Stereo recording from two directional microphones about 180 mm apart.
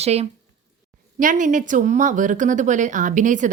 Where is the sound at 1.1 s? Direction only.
45° right (ahead or behind).